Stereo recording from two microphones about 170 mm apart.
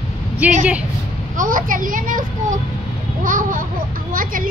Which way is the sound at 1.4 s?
50° right (ahead or behind).